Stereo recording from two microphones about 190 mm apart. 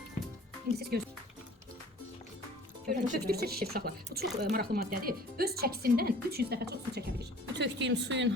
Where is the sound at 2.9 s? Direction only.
55° right (ahead or behind).